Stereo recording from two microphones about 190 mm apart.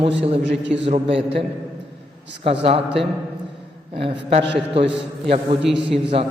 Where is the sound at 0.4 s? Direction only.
70° right (ahead or behind).